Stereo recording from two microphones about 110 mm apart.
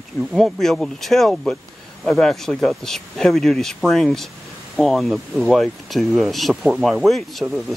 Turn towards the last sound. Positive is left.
turn(degrees=0)  # may be behind; listen again after turning